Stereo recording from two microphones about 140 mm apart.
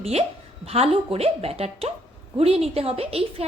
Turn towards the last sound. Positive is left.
turn(degrees=-45)  # may be behind; listen again after turning